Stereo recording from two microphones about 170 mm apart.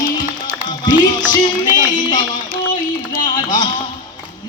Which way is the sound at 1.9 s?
25° left (ahead or behind).